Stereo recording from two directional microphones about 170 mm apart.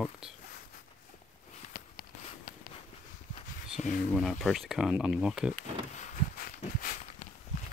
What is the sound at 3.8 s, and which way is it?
Speech, 45° left (ahead or behind).